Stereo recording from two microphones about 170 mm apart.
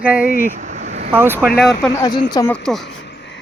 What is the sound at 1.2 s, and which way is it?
Speech, 15° right (ahead or behind).